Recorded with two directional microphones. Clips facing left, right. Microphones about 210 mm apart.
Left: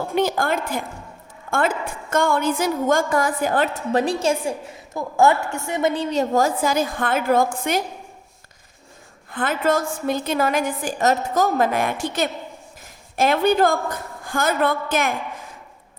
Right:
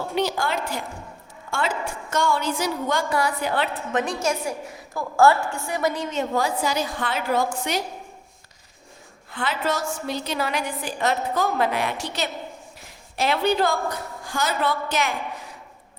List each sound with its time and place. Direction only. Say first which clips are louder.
0.1 s a woman's voice: left 4 dB; 50° left (ahead or behind)
3.9 s a woman's voice: left 4 dB; 35° left (ahead or behind); by 7.9 s 55° left (ahead or behind)
9.3 s a woman's voice: left 5 dB; 50° left (ahead or behind)